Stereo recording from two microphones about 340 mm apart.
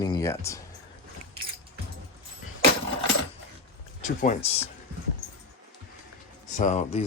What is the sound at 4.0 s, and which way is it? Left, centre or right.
Speech, left.